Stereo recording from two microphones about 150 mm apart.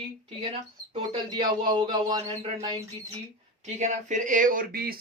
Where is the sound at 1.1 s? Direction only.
30° right (ahead or behind).